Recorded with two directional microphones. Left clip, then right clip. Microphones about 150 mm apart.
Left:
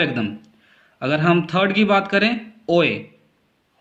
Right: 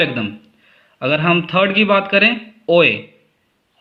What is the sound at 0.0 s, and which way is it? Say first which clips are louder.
Speech: right 3 dB; 30° right (ahead or behind).